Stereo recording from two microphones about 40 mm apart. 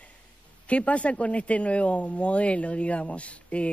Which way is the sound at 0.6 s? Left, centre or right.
Left.